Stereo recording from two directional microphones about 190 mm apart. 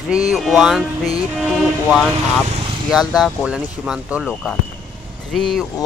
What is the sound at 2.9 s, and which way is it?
Speech, centre (ahead or behind).